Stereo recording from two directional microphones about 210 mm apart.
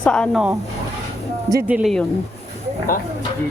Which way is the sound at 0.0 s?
5° left (ahead or behind).